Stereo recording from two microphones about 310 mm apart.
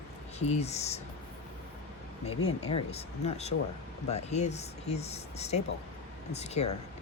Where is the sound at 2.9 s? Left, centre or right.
Left.